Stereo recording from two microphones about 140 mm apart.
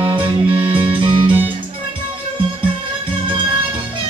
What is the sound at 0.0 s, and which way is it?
Music, 35° right (ahead or behind).